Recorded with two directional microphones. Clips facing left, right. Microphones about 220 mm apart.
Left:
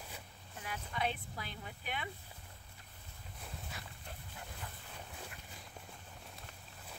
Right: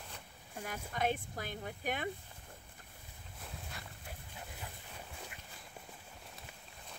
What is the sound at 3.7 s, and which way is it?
Dog, centre (ahead or behind).